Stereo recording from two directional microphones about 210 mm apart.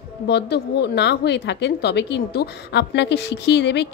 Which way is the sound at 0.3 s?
55° left (ahead or behind).